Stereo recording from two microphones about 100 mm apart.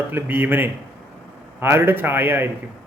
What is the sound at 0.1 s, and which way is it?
A man's voice, 20° right (ahead or behind).